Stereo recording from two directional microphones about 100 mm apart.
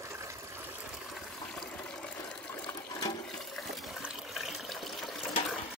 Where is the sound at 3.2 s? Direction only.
Centre (ahead or behind).